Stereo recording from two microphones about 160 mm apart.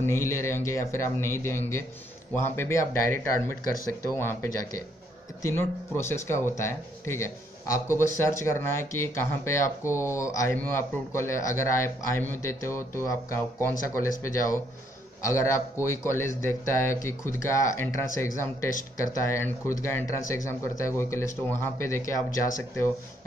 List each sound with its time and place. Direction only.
0.0 s speech: 15° left (ahead or behind)